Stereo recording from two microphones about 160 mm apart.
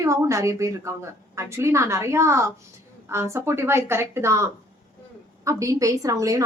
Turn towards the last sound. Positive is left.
turn(degrees=-20)  # may be behind; listen again after turning